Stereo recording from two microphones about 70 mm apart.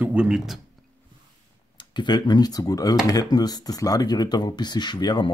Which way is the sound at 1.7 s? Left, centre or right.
Left.